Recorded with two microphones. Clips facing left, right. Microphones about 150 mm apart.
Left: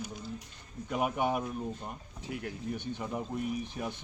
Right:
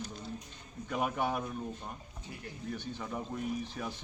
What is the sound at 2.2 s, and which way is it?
Speech, 90° left.